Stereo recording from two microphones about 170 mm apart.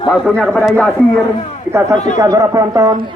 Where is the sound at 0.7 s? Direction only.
10° left (ahead or behind).